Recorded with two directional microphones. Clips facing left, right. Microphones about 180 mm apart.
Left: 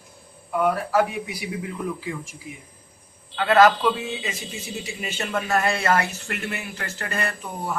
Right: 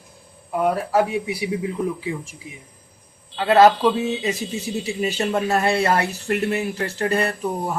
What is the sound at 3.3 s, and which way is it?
A man's voice, 25° right (ahead or behind).